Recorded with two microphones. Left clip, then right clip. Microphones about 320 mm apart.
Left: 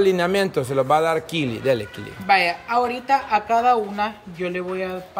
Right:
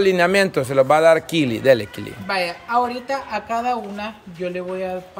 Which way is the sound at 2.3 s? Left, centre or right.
Centre.